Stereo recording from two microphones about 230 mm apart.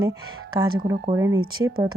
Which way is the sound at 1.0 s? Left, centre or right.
Centre.